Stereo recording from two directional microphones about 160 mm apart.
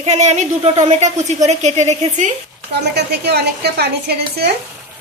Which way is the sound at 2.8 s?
90° right.